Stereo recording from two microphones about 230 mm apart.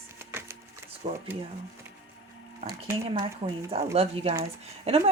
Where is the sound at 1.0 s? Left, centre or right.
Right.